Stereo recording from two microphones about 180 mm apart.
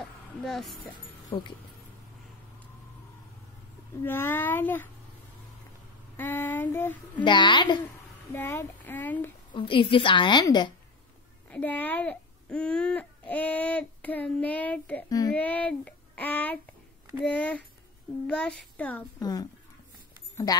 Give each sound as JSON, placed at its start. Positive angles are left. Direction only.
{"t": 0.4, "sound": "speech", "side_deg": 0}
{"t": 1.3, "sound": "a woman's voice", "side_deg": 30}
{"t": 4.0, "sound": "speech", "side_deg": 10}
{"t": 6.1, "sound": "child singing", "side_deg": 10}
{"t": 7.2, "sound": "a woman's voice", "side_deg": 25}
{"t": 8.3, "sound": "speech", "side_deg": 15}
{"t": 9.5, "sound": "a woman's voice", "side_deg": 30}
{"t": 11.5, "sound": "speech", "side_deg": 10}
{"t": 15.0, "sound": "a woman's voice", "side_deg": 20}
{"t": 15.3, "sound": "speech", "side_deg": 10}
{"t": 19.1, "sound": "a woman's voice", "side_deg": 20}